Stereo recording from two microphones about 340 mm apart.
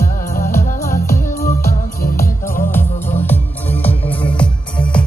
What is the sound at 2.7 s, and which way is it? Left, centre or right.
Music, centre.